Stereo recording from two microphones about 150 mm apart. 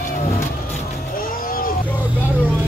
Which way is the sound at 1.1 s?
70° left (ahead or behind).